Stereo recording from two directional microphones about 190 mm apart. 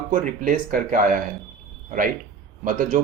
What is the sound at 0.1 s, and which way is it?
A man's voice, 45° right (ahead or behind).